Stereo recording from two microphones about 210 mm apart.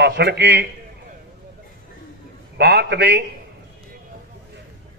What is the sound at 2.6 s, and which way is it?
Speech, 55° right (ahead or behind).